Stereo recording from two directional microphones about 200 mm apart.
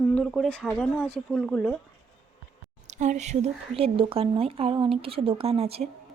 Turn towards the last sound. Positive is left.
turn(degrees=-30)  # may be behind; listen again after turning